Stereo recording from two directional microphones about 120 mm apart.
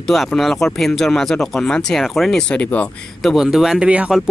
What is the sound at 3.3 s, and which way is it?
Speech, 5° right (ahead or behind).